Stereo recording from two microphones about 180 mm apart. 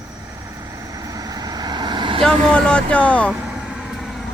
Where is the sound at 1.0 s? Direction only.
20° right (ahead or behind).